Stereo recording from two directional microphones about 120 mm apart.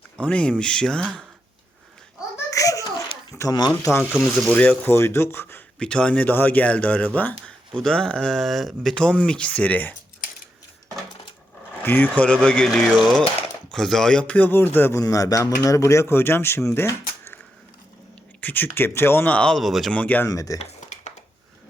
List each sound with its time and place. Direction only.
0.2 s speech: 10° left (ahead or behind)
2.5 s babbling: 30° left (ahead or behind)
3.3 s speech: 30° left (ahead or behind)
4.2 s speech: 10° left (ahead or behind)
5.8 s speech: 10° left (ahead or behind)
11.8 s speech: 15° left (ahead or behind)
15.0 s speech: 30° left (ahead or behind); by 19.9 s centre (ahead or behind)
19.9 s speech: 10° left (ahead or behind)
20.3 s speech: 30° left (ahead or behind)